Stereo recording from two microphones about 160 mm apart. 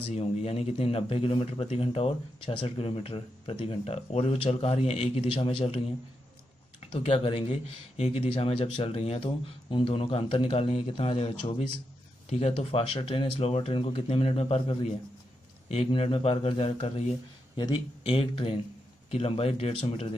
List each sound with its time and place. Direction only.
0.1 s a man's voice: 40° left (ahead or behind)
6.8 s a man's voice: 35° left (ahead or behind)